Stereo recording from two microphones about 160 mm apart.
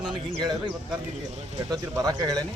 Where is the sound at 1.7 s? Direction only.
25° right (ahead or behind).